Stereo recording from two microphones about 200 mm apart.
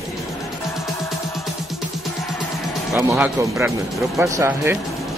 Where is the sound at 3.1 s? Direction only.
10° right (ahead or behind).